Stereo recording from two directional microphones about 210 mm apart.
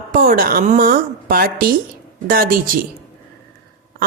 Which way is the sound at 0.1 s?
40° right (ahead or behind).